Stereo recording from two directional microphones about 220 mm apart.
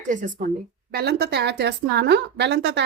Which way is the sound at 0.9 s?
45° right (ahead or behind).